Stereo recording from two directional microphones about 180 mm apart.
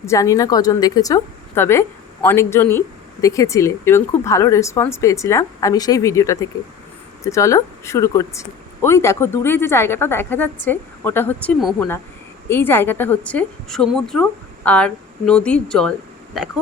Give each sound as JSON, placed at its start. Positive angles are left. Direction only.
{"t": 0.0, "sound": "a woman's voice", "side_deg": 15}